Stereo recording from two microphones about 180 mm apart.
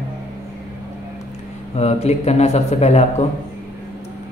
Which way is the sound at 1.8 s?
35° left (ahead or behind).